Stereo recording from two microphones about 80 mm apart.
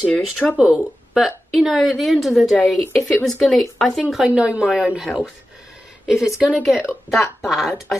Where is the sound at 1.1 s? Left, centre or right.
Centre.